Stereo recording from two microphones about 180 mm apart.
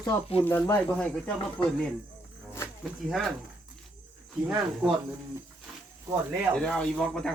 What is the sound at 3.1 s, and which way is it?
Speech, centre (ahead or behind).